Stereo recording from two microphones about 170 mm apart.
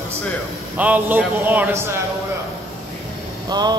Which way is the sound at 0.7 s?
10° right (ahead or behind).